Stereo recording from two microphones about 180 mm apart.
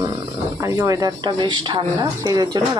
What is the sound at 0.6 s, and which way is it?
Speech, 20° right (ahead or behind).